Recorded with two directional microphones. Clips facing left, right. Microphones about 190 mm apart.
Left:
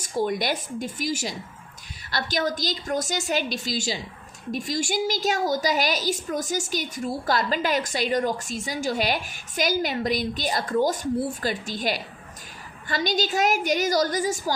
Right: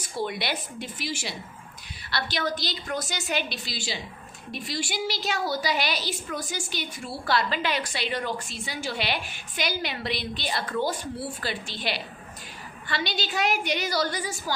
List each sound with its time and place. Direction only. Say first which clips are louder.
0.0 s a woman's voice: left 5 dB; 45° left (ahead or behind)